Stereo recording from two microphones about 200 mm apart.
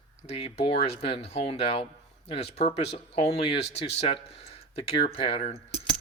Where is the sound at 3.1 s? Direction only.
30° left (ahead or behind).